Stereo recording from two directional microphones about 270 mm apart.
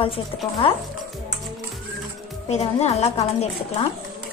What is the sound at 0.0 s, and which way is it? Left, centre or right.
Speech, centre.